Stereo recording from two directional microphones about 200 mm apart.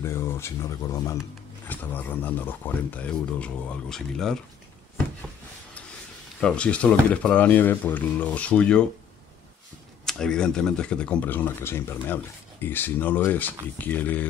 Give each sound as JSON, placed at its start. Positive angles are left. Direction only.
{"t": 0.0, "sound": "speech", "side_deg": 10}
{"t": 6.4, "sound": "speech", "side_deg": 5}
{"t": 10.0, "sound": "speech", "side_deg": 5}